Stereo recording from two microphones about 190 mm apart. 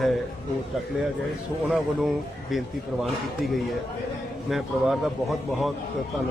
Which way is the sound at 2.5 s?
Centre (ahead or behind).